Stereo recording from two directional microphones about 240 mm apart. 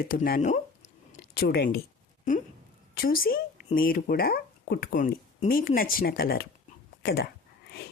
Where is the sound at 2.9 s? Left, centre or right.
Left.